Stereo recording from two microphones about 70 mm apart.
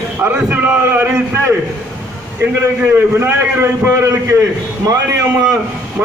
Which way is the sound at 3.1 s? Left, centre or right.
Right.